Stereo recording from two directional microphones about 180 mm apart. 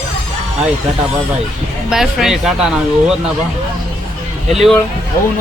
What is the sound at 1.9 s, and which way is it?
Speech, centre (ahead or behind).